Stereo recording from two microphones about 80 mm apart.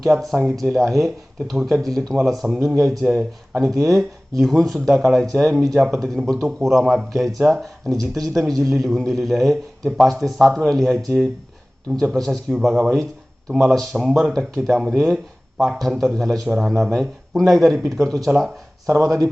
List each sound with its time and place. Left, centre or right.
0.1 s speech: centre
3.1 s speech: centre
3.8 s speech: centre